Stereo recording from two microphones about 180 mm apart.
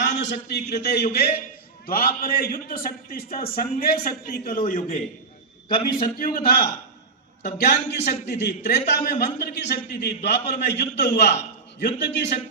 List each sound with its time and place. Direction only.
0.2 s a man's voice: 70° left (ahead or behind)
1.9 s a man's voice: 55° left (ahead or behind); by 12.3 s 75° left (ahead or behind)